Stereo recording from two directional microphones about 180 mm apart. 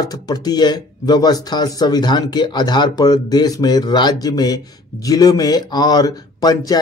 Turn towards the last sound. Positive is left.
turn(degrees=20)  # may be behind; listen again after turning